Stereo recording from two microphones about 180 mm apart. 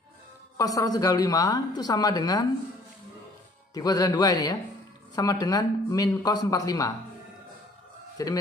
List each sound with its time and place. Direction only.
0.6 s a woman's voice: 20° left (ahead or behind)
3.7 s a woman's voice: 20° left (ahead or behind)
8.2 s a woman's voice: 20° left (ahead or behind)